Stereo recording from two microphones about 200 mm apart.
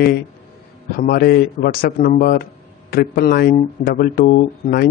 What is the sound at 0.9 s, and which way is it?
Speech, 50° left (ahead or behind).